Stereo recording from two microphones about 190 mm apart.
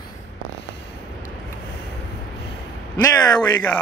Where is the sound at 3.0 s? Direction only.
15° left (ahead or behind).